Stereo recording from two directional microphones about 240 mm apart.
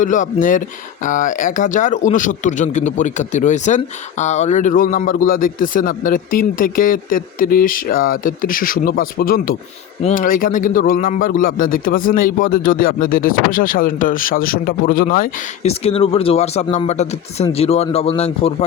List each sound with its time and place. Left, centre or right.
0.0 s a man's voice: left